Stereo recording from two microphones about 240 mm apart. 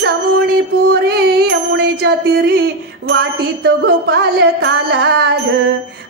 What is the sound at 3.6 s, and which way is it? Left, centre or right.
Music, right.